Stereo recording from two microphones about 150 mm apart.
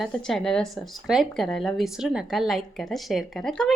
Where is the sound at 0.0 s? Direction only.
5° left (ahead or behind).